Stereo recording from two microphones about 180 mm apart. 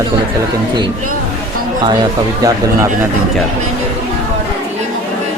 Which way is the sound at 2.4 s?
15° right (ahead or behind).